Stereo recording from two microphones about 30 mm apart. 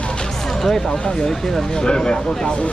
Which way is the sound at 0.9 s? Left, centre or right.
Left.